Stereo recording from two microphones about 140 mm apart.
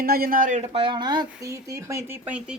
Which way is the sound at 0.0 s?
90° right.